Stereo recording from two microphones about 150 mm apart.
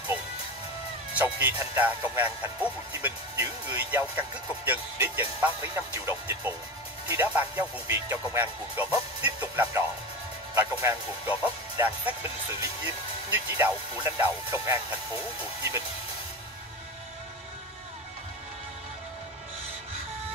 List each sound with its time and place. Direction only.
1.1 s speech: 10° right (ahead or behind)
13.3 s speech: 10° right (ahead or behind)